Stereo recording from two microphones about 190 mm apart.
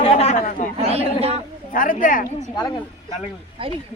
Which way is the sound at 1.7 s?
45° left (ahead or behind).